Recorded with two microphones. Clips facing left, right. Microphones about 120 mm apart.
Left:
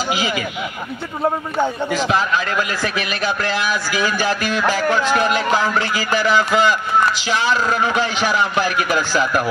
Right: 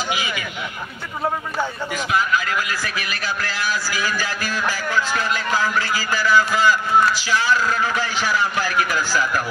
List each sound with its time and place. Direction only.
0.1 s speech: 30° left (ahead or behind)
1.6 s a man's voice: 30° left (ahead or behind)
4.7 s speech: 65° left (ahead or behind)
5.3 s a man's voice: 20° left (ahead or behind)